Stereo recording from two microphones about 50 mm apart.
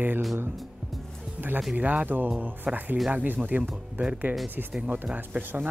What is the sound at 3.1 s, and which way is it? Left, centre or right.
Music, right.